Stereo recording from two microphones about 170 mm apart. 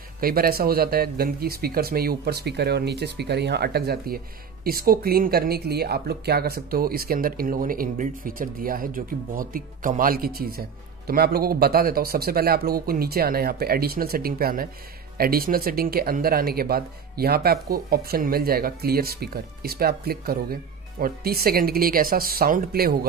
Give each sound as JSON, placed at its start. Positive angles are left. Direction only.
{"t": 0.2, "sound": "speech", "side_deg": -60}